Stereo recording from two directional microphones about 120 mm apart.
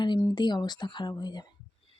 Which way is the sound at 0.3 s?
35° left (ahead or behind).